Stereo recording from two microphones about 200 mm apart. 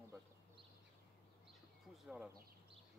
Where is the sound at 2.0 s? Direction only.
5° right (ahead or behind).